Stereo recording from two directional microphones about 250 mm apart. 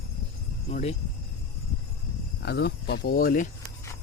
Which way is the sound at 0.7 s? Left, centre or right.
Left.